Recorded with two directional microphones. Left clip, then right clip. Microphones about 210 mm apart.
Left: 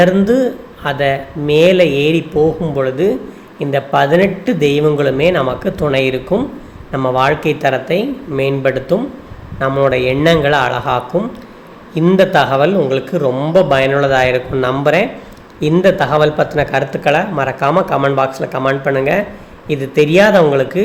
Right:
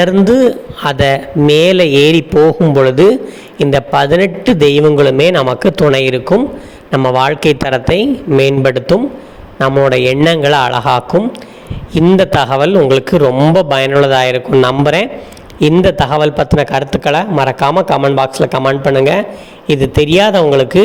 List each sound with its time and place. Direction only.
0.0 s a man's voice: 40° right (ahead or behind)